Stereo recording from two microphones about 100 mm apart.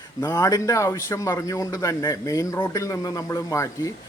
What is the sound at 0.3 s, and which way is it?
A man's voice, 35° left (ahead or behind).